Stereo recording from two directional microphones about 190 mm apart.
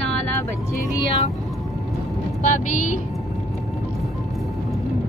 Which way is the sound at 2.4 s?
40° left (ahead or behind).